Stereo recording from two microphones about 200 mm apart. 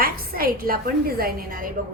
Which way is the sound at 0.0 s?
45° right (ahead or behind).